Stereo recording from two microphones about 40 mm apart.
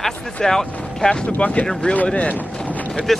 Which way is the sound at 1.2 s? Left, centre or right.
Left.